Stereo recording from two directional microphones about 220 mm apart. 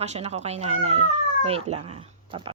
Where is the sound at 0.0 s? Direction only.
30° right (ahead or behind).